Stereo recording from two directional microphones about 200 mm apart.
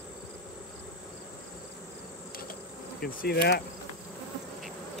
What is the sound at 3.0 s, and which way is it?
Speech, 50° left (ahead or behind).